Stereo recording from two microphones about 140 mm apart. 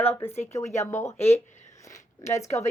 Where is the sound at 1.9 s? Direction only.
20° left (ahead or behind).